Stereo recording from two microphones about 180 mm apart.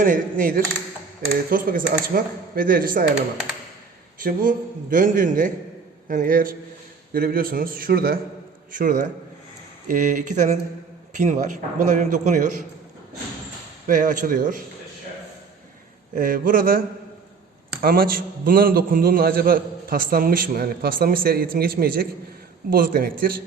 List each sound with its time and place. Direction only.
0.0 s speech: 50° right (ahead or behind)
4.2 s speech: 50° right (ahead or behind)
9.9 s speech: 45° right (ahead or behind)
13.8 s speech: 45° right (ahead or behind)
16.1 s speech: 50° right (ahead or behind)
17.8 s a man's voice: 55° right (ahead or behind)